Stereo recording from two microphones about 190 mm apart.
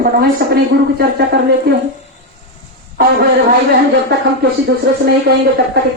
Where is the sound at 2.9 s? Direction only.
55° right (ahead or behind).